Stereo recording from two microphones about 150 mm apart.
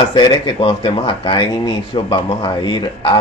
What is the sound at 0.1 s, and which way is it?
Speech, 35° left (ahead or behind).